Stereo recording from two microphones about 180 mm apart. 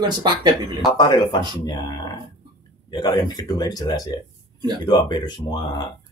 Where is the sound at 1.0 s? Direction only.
25° left (ahead or behind).